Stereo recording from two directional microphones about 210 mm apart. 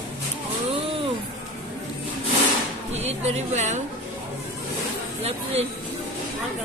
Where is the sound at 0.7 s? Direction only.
25° right (ahead or behind).